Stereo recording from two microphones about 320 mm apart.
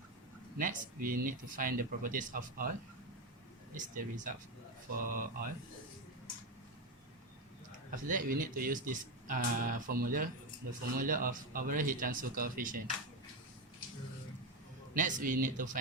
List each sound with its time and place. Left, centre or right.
0.5 s speech: right
3.8 s speech: right
7.9 s speech: right
14.9 s speech: right